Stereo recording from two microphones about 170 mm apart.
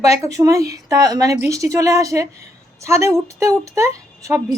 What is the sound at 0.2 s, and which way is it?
Speech, 20° right (ahead or behind).